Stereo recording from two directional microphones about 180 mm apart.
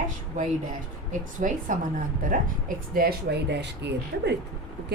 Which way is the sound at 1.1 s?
45° right (ahead or behind).